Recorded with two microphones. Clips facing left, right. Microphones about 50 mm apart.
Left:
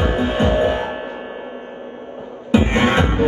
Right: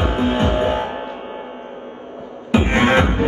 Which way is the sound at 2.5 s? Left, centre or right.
Right.